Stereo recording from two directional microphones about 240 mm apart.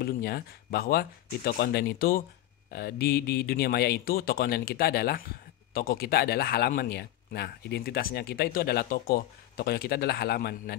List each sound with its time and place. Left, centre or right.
0.0 s speech: left